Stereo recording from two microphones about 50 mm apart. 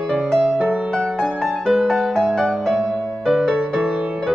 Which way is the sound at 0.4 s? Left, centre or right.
Centre.